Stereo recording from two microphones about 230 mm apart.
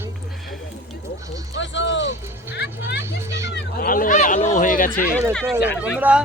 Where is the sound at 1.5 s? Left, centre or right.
Left.